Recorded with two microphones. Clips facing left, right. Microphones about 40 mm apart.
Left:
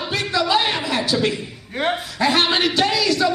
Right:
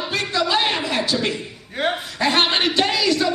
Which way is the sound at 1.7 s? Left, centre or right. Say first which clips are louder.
Left 1 dB; centre.